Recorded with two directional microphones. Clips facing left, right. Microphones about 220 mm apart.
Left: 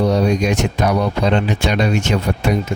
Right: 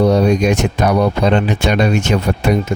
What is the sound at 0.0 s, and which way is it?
Speech, 55° right (ahead or behind).